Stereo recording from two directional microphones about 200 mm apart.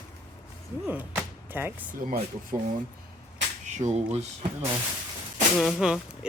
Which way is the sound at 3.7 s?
35° right (ahead or behind).